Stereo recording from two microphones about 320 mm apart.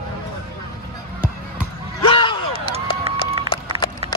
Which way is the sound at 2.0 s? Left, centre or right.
Centre.